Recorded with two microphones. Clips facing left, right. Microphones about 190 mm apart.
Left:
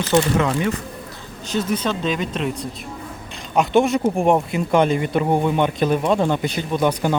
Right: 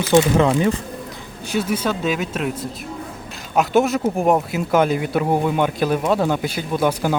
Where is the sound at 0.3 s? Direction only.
30° right (ahead or behind).